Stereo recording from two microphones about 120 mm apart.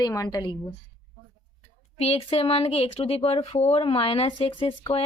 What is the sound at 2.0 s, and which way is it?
Speech, 60° left (ahead or behind).